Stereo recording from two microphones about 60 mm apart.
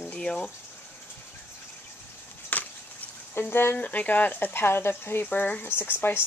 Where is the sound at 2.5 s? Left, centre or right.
Left.